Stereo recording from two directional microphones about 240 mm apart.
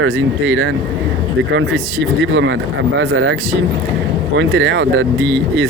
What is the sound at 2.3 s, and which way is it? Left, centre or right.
Speech, right.